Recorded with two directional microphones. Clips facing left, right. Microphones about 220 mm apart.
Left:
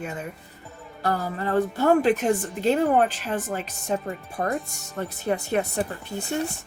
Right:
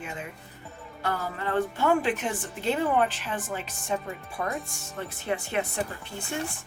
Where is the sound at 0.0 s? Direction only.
40° left (ahead or behind).